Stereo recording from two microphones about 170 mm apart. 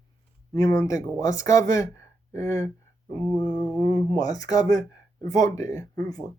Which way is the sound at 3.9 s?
20° left (ahead or behind).